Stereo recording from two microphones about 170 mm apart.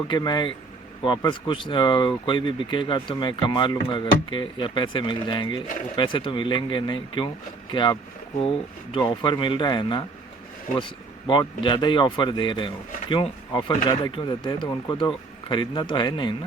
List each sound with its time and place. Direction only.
0.1 s speech: 25° left (ahead or behind)